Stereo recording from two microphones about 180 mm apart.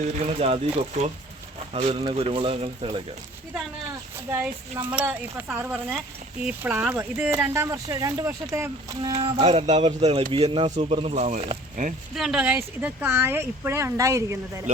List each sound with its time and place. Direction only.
0.3 s speech: 35° right (ahead or behind)
1.7 s speech: 35° right (ahead or behind)
4.3 s speech: 10° right (ahead or behind)
9.1 s speech: 35° right (ahead or behind)
12.1 s speech: centre (ahead or behind)